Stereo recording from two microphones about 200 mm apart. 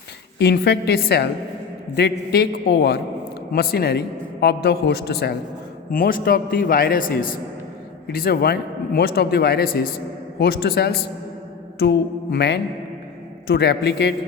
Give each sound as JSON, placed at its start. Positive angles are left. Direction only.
{"t": 0.3, "sound": "speech", "side_deg": 55}
{"t": 11.8, "sound": "mantra", "side_deg": 55}